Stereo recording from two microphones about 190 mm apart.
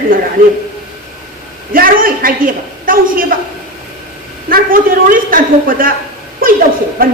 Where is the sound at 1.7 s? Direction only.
50° right (ahead or behind).